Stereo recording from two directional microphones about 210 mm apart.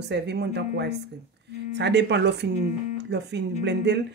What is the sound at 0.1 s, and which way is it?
Speech, 55° right (ahead or behind).